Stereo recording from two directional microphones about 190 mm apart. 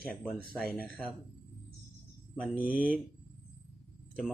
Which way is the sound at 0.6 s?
5° left (ahead or behind).